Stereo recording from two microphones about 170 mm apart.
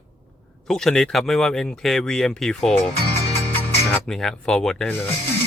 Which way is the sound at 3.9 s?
5° left (ahead or behind).